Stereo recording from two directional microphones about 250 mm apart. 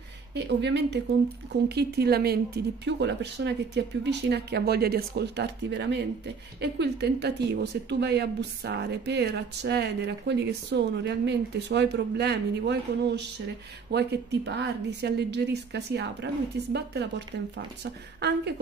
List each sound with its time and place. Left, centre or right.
0.3 s speech: right